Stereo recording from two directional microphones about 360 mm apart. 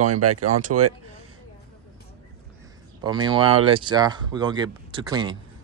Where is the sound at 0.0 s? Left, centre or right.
Right.